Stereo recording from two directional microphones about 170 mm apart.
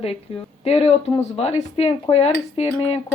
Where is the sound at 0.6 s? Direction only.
35° left (ahead or behind).